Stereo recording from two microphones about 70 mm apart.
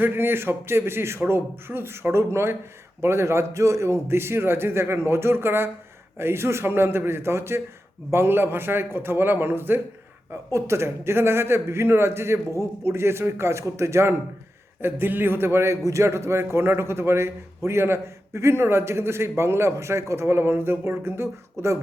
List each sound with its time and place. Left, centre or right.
0.0 s a man's voice: right
14.8 s a man's voice: right